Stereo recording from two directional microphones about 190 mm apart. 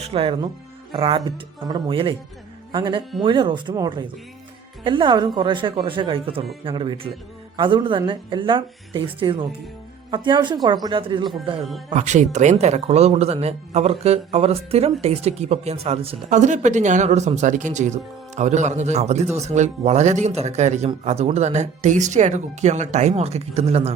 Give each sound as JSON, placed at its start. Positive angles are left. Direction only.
{"t": 0.0, "sound": "speech", "side_deg": -30}
{"t": 11.9, "sound": "speech", "side_deg": -40}